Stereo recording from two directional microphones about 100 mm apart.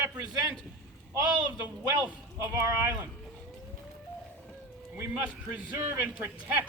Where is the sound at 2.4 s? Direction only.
30° right (ahead or behind).